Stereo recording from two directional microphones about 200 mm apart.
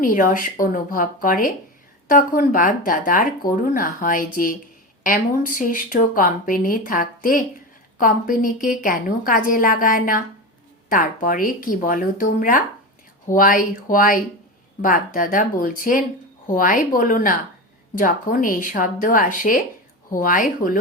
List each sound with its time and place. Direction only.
0.0 s speech: 45° left (ahead or behind)